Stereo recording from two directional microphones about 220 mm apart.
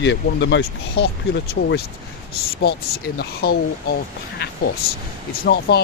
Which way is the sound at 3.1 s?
45° left (ahead or behind).